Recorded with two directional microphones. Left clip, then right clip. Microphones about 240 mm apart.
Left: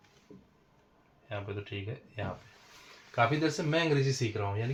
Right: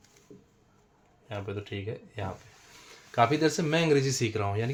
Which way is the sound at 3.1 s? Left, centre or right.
Right.